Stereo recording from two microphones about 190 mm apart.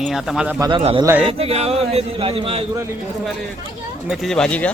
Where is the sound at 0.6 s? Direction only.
25° right (ahead or behind).